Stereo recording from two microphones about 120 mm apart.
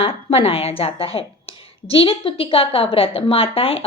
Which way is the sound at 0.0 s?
50° left (ahead or behind).